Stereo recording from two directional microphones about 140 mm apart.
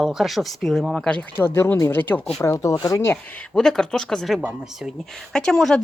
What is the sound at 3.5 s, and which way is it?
Speech, 5° left (ahead or behind).